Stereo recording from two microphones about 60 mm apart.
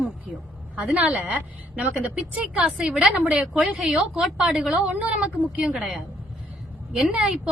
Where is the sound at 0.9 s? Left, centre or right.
Right.